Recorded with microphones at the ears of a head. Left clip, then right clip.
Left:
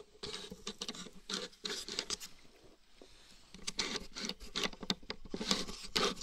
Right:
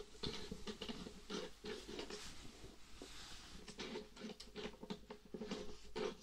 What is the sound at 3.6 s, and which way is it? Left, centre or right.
Patter, left.